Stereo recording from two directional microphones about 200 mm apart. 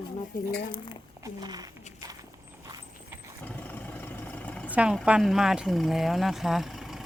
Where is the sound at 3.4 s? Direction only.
10° left (ahead or behind).